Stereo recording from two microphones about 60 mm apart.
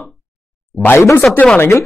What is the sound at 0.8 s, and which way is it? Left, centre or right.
Speech, left.